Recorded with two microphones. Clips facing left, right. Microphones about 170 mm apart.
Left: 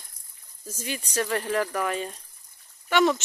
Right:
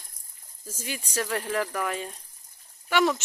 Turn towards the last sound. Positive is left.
turn(degrees=-5)  # may be behind; listen again after turning